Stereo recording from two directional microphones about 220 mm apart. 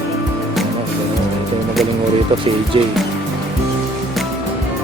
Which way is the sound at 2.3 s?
25° right (ahead or behind).